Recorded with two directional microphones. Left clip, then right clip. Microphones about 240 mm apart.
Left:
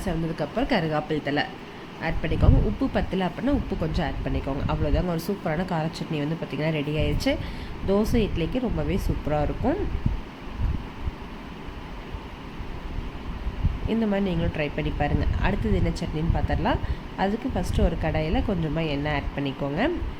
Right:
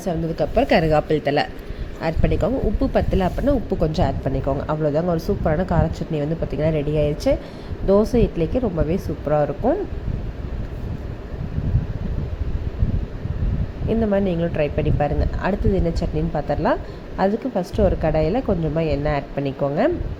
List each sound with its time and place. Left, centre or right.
0.0 s a woman's voice: centre
13.8 s a woman's voice: centre